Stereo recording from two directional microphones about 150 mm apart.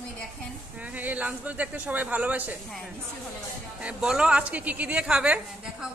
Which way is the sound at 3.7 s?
5° right (ahead or behind).